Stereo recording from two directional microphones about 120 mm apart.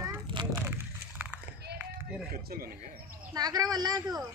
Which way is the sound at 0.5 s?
20° right (ahead or behind).